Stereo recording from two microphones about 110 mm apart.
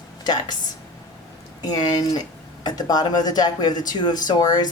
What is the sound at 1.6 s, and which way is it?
Speech, 40° left (ahead or behind).